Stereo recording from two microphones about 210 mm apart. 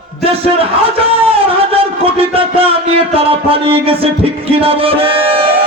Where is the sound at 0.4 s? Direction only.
25° right (ahead or behind).